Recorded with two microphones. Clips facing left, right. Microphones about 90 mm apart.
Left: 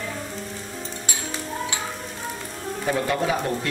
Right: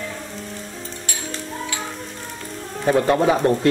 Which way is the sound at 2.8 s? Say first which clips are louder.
Right 7 dB; 35° right (ahead or behind).